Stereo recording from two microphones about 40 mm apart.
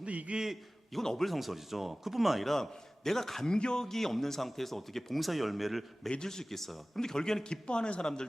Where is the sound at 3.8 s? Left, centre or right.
Centre.